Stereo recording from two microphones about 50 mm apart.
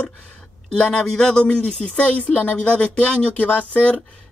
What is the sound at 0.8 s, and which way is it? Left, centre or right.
A man's voice, centre.